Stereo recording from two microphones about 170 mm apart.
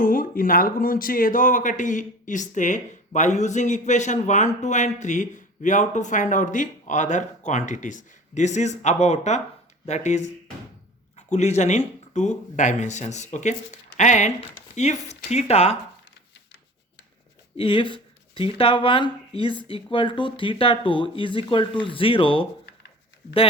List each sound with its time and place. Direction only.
0.0 s a man's voice: 55° left (ahead or behind); by 15.8 s 40° left (ahead or behind)
17.6 s speech: 30° left (ahead or behind)